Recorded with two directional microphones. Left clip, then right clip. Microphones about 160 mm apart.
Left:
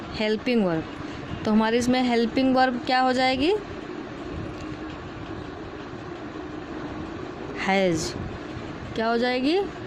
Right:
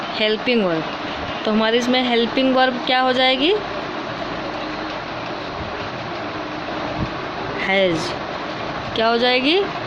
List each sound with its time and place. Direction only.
0.2 s speech: 55° left (ahead or behind)
7.7 s speech: 55° left (ahead or behind)
9.0 s speech: 50° left (ahead or behind)